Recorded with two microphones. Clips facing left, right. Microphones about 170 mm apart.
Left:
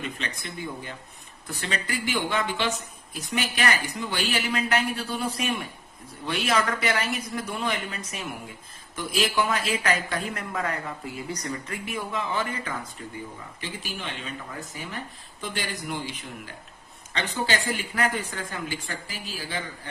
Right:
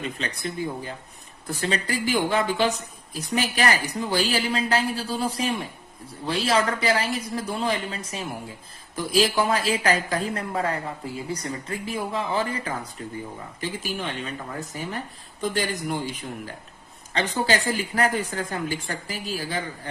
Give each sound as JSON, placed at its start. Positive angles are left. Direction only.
{"t": 0.0, "sound": "a woman's voice", "side_deg": -35}